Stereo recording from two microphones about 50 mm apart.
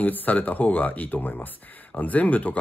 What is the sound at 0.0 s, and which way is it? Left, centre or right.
Speech, left.